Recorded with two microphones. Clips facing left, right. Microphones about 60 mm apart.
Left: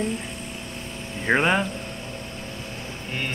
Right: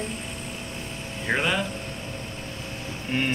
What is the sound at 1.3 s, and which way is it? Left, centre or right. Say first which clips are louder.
Speech: left 4 dB; left.